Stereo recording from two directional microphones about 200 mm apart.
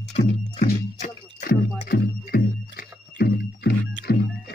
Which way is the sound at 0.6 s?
40° left (ahead or behind).